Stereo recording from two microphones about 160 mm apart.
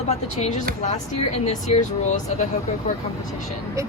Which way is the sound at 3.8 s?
20° right (ahead or behind).